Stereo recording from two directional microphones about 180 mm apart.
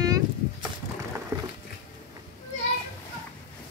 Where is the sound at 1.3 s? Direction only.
15° right (ahead or behind).